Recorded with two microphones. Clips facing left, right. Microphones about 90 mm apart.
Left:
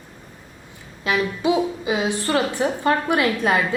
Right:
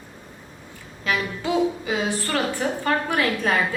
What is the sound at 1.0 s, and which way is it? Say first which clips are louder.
A woman's voice: left 5 dB; 20° left (ahead or behind).